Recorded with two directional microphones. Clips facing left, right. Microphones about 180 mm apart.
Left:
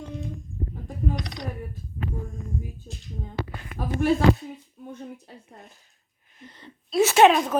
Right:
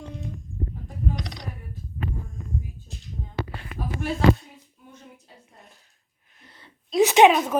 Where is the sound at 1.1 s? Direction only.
55° left (ahead or behind).